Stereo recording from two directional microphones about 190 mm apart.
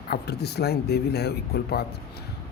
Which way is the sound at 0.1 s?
55° left (ahead or behind).